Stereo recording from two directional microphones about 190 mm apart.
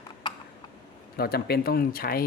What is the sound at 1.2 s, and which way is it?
Speech, 55° left (ahead or behind).